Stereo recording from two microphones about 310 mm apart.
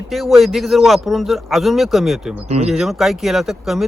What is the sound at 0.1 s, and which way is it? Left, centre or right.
Speech, centre.